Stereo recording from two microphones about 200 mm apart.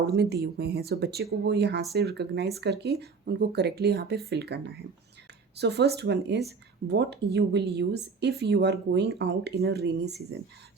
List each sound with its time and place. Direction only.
0.2 s speech: 55° right (ahead or behind)